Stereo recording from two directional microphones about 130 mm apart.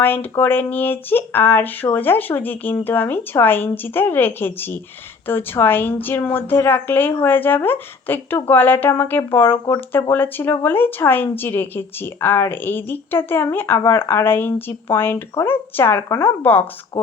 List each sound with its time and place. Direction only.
0.0 s speech: 15° left (ahead or behind)